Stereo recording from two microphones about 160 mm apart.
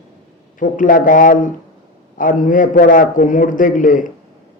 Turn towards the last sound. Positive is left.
turn(degrees=55)  # may be behind; listen again after turning